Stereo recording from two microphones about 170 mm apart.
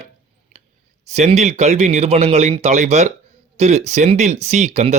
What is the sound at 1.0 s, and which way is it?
Speech, 40° right (ahead or behind).